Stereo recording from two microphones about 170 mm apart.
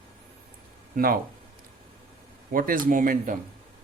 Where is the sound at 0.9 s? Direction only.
60° right (ahead or behind).